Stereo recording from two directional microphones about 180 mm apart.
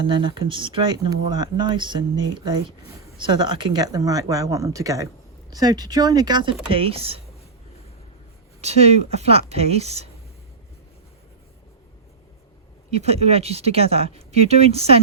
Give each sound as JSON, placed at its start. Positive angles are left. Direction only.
{"t": 0.0, "sound": "speech", "side_deg": -25}
{"t": 8.6, "sound": "speech", "side_deg": -35}
{"t": 12.9, "sound": "speech", "side_deg": -35}